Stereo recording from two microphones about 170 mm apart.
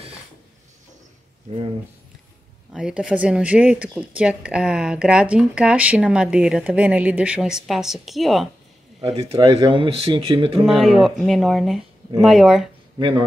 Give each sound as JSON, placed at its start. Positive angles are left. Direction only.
{"t": 2.7, "sound": "speech", "side_deg": -5}
{"t": 9.0, "sound": "speech", "side_deg": -30}
{"t": 10.6, "sound": "speech", "side_deg": 0}